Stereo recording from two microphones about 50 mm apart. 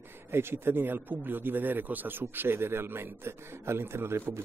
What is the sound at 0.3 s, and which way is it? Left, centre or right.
A man's voice, right.